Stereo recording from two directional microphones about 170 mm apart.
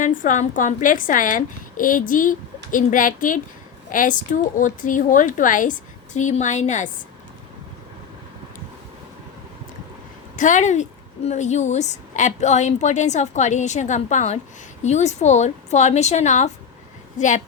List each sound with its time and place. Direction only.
0.0 s a woman's voice: 50° left (ahead or behind)
10.3 s a woman's voice: 50° left (ahead or behind)